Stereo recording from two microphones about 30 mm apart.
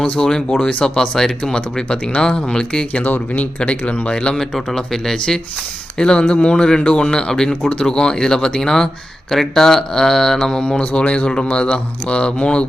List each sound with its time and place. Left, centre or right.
0.0 s speech: left
0.7 s speech: left
1.1 s speech: left
3.0 s speech: left
3.6 s speech: left; by 10.6 s centre
10.6 s speech: left